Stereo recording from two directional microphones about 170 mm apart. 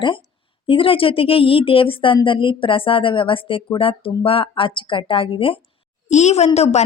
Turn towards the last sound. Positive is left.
turn(degrees=40)  # may be behind; listen again after turning